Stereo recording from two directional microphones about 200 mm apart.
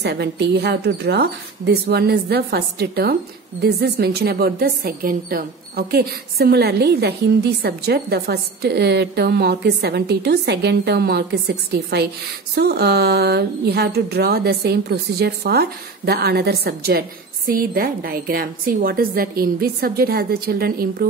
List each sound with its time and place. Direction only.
0.0 s a woman's voice: 55° right (ahead or behind)